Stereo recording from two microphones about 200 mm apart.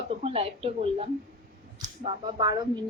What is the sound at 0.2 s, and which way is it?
Speech, 30° right (ahead or behind).